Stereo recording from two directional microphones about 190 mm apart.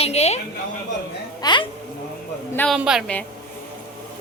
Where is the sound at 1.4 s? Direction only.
25° left (ahead or behind).